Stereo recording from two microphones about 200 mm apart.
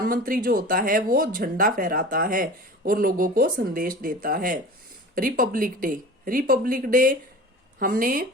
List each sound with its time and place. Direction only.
0.0 s speech: 45° right (ahead or behind)